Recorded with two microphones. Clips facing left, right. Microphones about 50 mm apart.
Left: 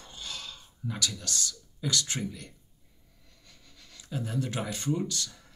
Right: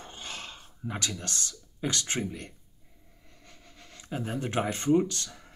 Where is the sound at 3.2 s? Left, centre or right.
Right.